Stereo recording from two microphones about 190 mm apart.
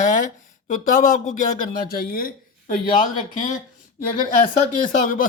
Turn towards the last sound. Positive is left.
turn(degrees=45)  # may be behind; listen again after turning